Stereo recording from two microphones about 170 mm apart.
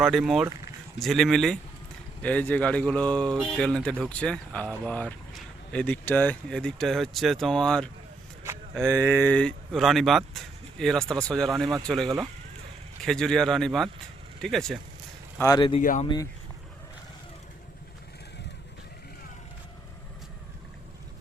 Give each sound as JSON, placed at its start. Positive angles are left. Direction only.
{"t": 0.0, "sound": "speech", "side_deg": 0}
{"t": 0.4, "sound": "speech", "side_deg": -15}
{"t": 0.9, "sound": "speech", "side_deg": 0}
{"t": 15.4, "sound": "speech", "side_deg": 20}
{"t": 15.8, "sound": "speech", "side_deg": 50}